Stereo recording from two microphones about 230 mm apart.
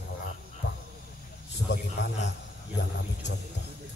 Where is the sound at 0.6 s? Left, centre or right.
Left.